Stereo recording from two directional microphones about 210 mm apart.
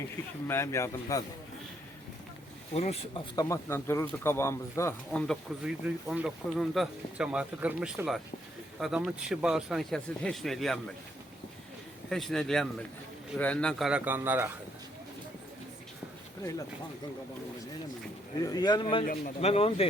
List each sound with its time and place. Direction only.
0.4 s speech: 10° left (ahead or behind)
2.7 s speech: 30° left (ahead or behind)
3.3 s speech: 15° left (ahead or behind)
5.3 s speech: centre (ahead or behind)
12.0 s speech: centre (ahead or behind)
18.4 s speech: 20° left (ahead or behind)